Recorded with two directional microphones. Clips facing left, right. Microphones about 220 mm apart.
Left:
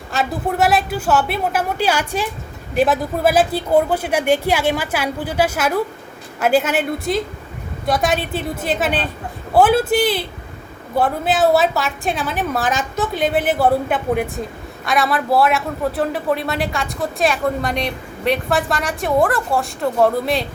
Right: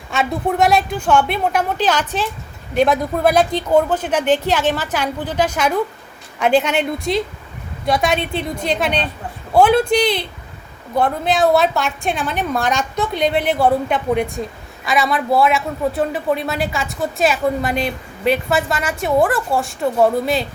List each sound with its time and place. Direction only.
0.1 s a man's voice: 5° left (ahead or behind)